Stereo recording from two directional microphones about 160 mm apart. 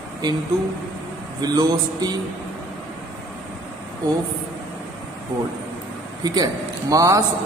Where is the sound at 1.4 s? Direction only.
25° right (ahead or behind).